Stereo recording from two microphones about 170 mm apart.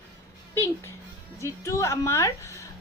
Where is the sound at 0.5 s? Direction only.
15° left (ahead or behind).